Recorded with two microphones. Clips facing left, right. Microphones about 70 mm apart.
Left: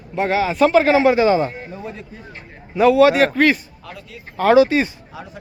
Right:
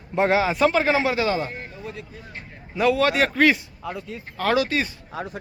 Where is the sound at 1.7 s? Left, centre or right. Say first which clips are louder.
Left 4 dB; left.